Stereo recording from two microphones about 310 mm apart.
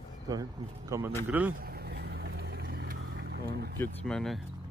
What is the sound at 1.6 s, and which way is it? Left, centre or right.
Vehicle, right.